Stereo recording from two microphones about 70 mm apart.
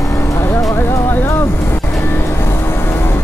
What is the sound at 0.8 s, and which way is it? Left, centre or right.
Music, left.